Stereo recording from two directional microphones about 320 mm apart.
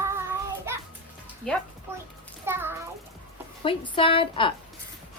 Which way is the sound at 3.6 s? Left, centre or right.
Centre.